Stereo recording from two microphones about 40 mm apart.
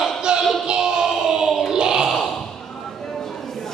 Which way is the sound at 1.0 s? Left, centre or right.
Centre.